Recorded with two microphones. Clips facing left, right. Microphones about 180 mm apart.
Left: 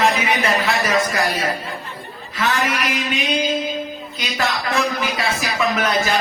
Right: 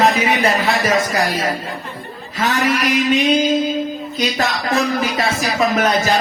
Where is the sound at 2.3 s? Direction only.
40° right (ahead or behind).